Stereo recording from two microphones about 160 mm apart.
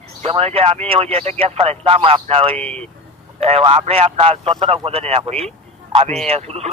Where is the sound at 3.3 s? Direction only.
40° right (ahead or behind).